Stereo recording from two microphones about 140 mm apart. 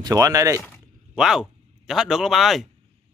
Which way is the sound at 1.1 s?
5° right (ahead or behind).